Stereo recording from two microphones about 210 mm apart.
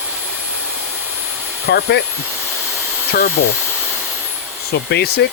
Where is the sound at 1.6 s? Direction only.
50° left (ahead or behind).